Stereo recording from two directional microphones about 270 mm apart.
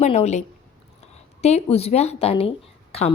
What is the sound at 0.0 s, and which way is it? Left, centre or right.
A woman's voice, left.